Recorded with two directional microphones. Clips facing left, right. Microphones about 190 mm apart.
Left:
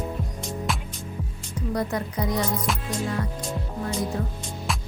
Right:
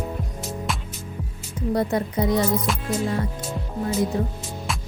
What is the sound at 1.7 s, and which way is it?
Speech, 25° right (ahead or behind).